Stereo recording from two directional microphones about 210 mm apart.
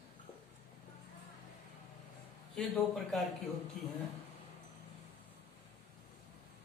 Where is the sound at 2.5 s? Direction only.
Centre (ahead or behind).